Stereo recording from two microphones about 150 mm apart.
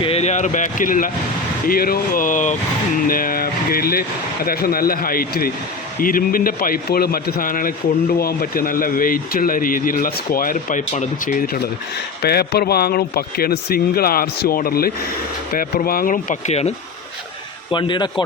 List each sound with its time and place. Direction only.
0.0 s speech: 45° left (ahead or behind); by 1.1 s 65° left (ahead or behind)
1.6 s speech: 80° left; by 2.6 s 60° left (ahead or behind)
3.1 s speech: 75° left (ahead or behind)
6.0 s speech: 70° left (ahead or behind)
8.2 s speech: 85° left; by 11.7 s 70° left (ahead or behind)
12.2 s speech: 90° left
15.5 s speech: 75° left (ahead or behind); by 16.7 s 50° left (ahead or behind)
17.7 s speech: 30° left (ahead or behind)